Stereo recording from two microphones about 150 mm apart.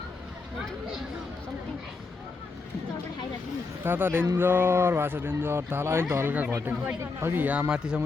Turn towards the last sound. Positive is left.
turn(degrees=-5)  # may be behind; listen again after turning